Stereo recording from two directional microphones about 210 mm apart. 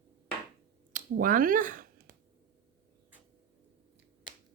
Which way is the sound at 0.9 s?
40° right (ahead or behind).